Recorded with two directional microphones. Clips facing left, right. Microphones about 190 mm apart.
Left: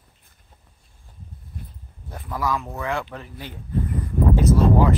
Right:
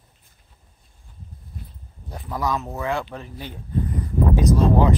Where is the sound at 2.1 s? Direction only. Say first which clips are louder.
Even; 20° right (ahead or behind).